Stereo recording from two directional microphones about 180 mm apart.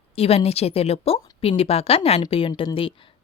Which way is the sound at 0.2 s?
35° left (ahead or behind).